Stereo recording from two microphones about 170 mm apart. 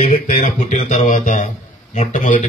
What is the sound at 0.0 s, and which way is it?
A man's voice, 40° left (ahead or behind).